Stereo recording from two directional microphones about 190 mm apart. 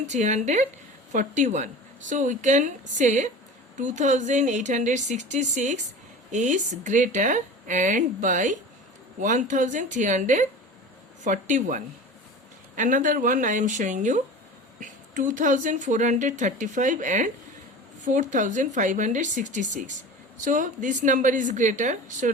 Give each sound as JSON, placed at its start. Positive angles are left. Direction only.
{"t": 0.0, "sound": "speech", "side_deg": -40}